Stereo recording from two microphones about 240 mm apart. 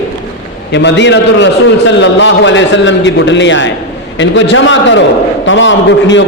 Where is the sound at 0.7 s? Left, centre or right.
Left.